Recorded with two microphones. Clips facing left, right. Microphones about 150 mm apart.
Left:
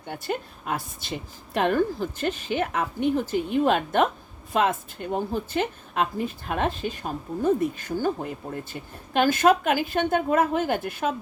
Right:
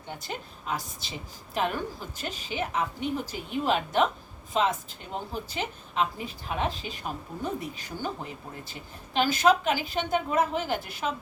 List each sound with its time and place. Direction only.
0.1 s a woman's voice: 55° left (ahead or behind)